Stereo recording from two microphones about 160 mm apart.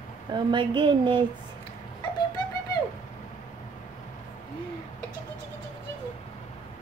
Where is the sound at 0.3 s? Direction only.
30° right (ahead or behind).